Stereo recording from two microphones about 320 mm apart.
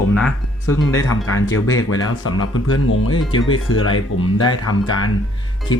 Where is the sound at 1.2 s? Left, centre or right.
Left.